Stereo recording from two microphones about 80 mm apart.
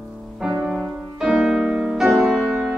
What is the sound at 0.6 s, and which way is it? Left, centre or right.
Music, centre.